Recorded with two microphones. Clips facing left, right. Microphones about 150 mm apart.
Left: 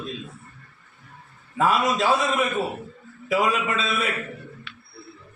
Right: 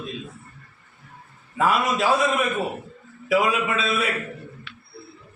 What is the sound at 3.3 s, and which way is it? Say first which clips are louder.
Speech: right 2 dB; 5° right (ahead or behind).